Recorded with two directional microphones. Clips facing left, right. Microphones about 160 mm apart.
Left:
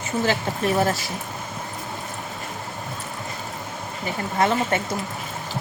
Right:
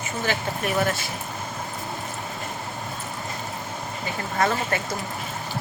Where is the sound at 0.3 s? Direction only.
30° left (ahead or behind).